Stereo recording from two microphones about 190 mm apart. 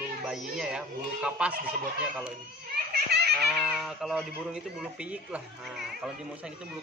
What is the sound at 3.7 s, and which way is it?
Speech, centre (ahead or behind).